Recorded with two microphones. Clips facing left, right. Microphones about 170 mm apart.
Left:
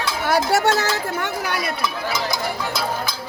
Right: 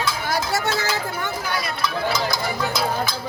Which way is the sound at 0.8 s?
70° left (ahead or behind).